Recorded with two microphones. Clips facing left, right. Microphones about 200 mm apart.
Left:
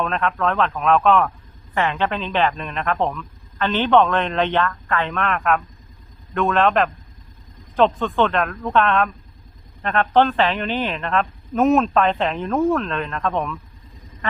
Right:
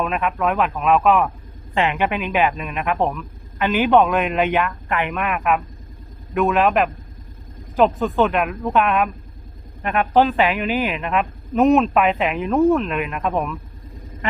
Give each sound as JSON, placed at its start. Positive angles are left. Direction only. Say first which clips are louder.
{"t": 0.0, "sound": "speech", "louder": "right 1 dB", "side_deg": -10}